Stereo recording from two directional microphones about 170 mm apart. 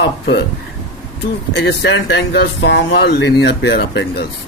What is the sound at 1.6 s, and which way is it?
Speech, 90° left.